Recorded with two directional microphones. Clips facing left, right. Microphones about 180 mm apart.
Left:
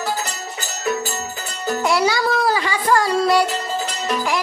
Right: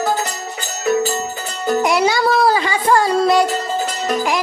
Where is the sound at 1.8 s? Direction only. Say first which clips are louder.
Right 1 dB; 20° right (ahead or behind).